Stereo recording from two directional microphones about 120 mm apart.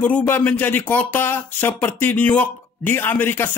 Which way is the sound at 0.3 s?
15° left (ahead or behind).